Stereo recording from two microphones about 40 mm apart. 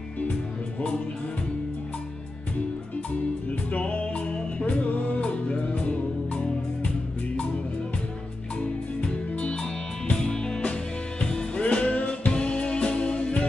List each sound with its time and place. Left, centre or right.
3.7 s music: left
4.1 s music: left
5.5 s music: left
9.0 s music: left
10.1 s music: centre
11.6 s music: left
12.3 s music: left